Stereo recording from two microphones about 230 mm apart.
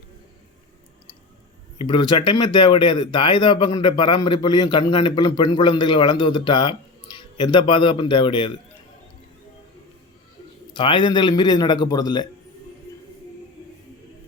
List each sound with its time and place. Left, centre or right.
1.8 s speech: left
10.8 s speech: left